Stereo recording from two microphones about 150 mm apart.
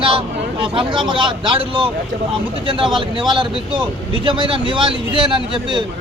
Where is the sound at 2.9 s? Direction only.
30° right (ahead or behind).